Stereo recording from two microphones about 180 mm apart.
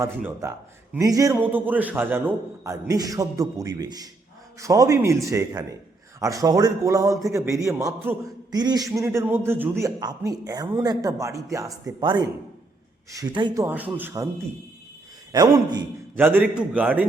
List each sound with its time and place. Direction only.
0.0 s a man's voice: 10° right (ahead or behind)
15.3 s a man's voice: 20° right (ahead or behind)